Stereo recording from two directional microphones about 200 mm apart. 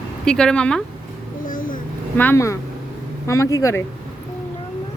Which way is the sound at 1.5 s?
45° left (ahead or behind).